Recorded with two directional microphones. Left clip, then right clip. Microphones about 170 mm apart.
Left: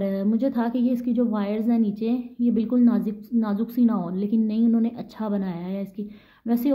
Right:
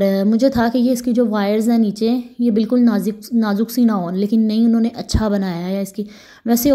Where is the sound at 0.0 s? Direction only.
50° right (ahead or behind).